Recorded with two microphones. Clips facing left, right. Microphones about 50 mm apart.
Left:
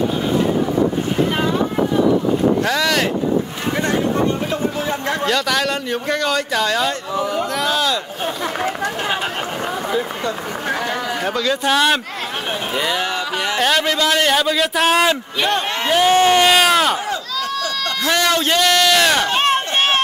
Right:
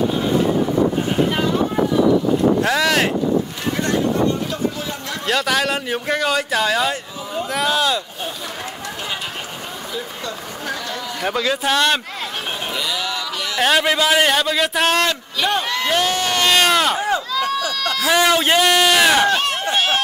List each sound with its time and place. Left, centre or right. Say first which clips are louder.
2.6 s speech: right 1 dB; centre
5.2 s speech: right 2 dB; centre
11.2 s speech: even; centre
12.7 s a sound: left 5 dB; left
13.6 s speech: right 2 dB; centre
16.1 s speech: left 7 dB; left
16.4 s speech: left 2 dB; centre
17.4 s a sound: right 2 dB; centre
17.8 s speech: right 2 dB; centre
19.3 s chop: left 2 dB; left